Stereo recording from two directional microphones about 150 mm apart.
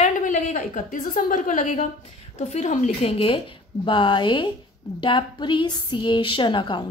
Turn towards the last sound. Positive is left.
turn(degrees=30)  # may be behind; listen again after turning